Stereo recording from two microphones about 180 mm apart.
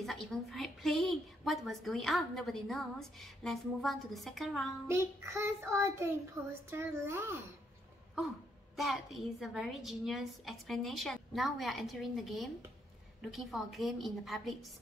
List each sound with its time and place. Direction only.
0.0 s a woman's voice: centre (ahead or behind)
4.8 s a child's voice: 15° right (ahead or behind)
8.7 s a woman's voice: centre (ahead or behind)